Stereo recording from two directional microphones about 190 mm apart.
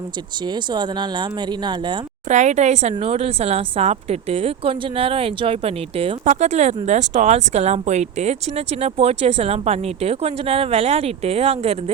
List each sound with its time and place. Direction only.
0.4 s speech: 25° right (ahead or behind)
2.3 s a woman's voice: 40° right (ahead or behind)